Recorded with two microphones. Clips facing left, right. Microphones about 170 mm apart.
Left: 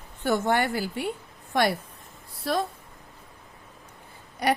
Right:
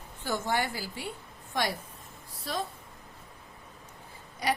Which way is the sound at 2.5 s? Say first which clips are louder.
Left 8 dB; 70° left (ahead or behind).